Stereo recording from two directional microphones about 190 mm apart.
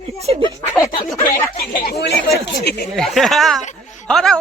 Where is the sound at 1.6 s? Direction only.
55° left (ahead or behind).